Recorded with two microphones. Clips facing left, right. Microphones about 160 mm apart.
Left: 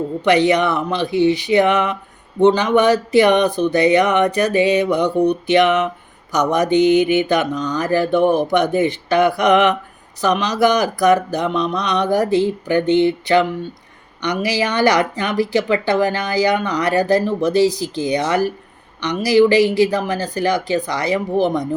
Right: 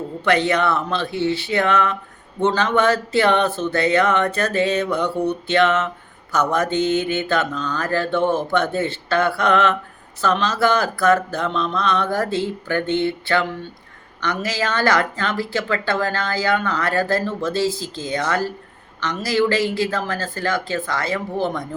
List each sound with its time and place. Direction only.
0.3 s speech: 15° left (ahead or behind)